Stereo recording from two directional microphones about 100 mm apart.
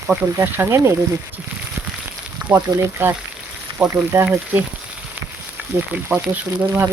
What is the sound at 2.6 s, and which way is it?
Speech, 35° right (ahead or behind).